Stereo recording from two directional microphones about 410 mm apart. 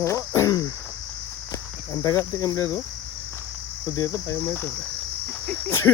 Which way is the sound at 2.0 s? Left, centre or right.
Centre.